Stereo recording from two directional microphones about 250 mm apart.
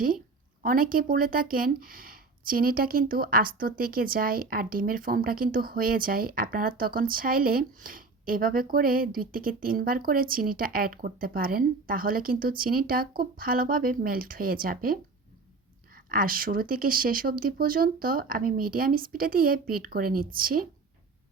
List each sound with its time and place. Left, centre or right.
0.6 s speech: right
16.0 s speech: right